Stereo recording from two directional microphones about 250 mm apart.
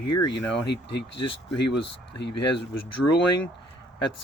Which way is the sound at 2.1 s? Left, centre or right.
Left.